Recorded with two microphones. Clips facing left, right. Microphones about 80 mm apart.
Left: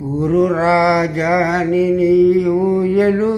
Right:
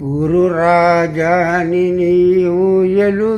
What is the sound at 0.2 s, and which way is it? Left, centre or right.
Mantra, right.